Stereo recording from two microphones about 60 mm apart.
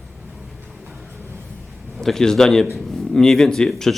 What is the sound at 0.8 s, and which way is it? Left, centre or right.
Vehicle, right.